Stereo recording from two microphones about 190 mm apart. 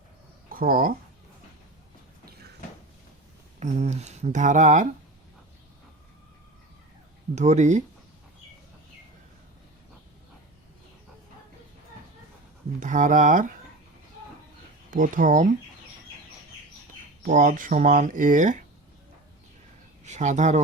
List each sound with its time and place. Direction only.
0.5 s speech: 50° right (ahead or behind)
2.2 s a sound: 55° right (ahead or behind)
3.6 s speech: 35° right (ahead or behind)
7.3 s speech: 35° right (ahead or behind)
12.8 s speech: 40° right (ahead or behind)
14.8 s speech: 45° right (ahead or behind)
17.2 s speech: 40° right (ahead or behind)
20.1 s speech: 40° right (ahead or behind)